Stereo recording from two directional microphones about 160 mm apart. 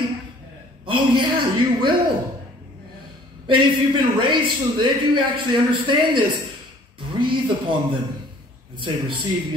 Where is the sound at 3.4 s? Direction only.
30° right (ahead or behind).